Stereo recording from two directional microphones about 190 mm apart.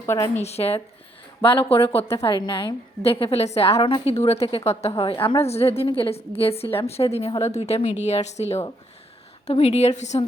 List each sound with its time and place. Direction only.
0.0 s speech: 15° left (ahead or behind)
0.4 s a woman's voice: 35° left (ahead or behind)